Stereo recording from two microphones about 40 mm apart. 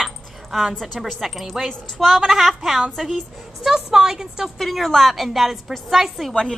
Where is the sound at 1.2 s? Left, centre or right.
Centre.